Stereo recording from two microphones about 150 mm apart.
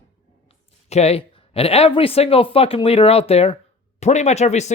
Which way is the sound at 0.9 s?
45° left (ahead or behind).